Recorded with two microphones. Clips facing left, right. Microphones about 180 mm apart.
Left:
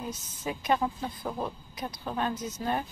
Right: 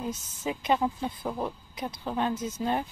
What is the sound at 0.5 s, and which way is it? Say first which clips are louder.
Speech: right 1 dB; 20° right (ahead or behind).